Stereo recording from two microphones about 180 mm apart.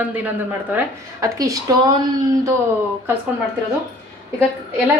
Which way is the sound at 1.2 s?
20° right (ahead or behind).